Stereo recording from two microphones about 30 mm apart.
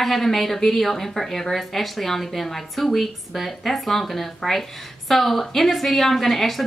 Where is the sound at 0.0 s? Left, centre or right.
Centre.